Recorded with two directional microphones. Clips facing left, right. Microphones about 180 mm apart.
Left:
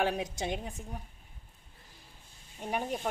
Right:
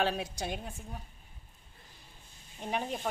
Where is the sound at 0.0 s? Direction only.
15° left (ahead or behind).